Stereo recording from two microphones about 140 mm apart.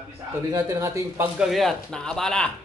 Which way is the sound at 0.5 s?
20° right (ahead or behind).